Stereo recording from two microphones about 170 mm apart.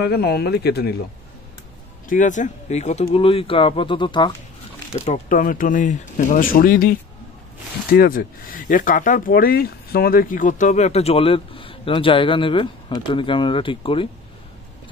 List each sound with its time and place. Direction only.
0.0 s speech: 70° left (ahead or behind)
2.0 s speech: 50° left (ahead or behind); by 4.4 s 25° left (ahead or behind)
5.0 s speech: 45° left (ahead or behind); by 14.0 s 30° left (ahead or behind)